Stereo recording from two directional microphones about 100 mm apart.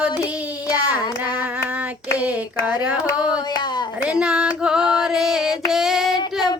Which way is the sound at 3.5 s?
50° left (ahead or behind).